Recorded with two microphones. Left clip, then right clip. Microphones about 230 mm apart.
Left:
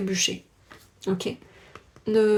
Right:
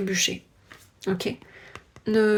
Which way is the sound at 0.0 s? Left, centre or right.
Right.